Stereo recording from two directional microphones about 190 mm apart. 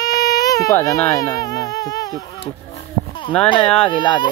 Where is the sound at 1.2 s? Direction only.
20° left (ahead or behind).